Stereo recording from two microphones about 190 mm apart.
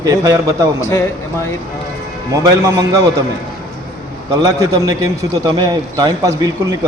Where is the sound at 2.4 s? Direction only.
20° right (ahead or behind).